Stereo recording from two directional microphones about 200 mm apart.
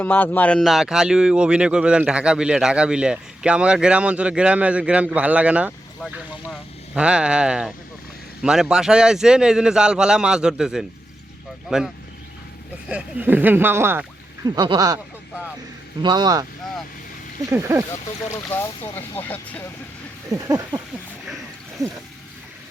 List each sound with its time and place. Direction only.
0.0 s speech: 10° left (ahead or behind)
12.9 s speech: 5° right (ahead or behind)
16.0 s speech: 20° right (ahead or behind)
17.5 s speech: 10° right (ahead or behind)
18.4 s speech: 10° left (ahead or behind)
20.5 s speech: 15° right (ahead or behind)